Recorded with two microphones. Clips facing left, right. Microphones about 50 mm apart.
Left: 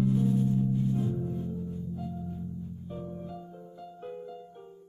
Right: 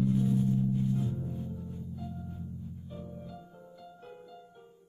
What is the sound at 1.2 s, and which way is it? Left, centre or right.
Music, left.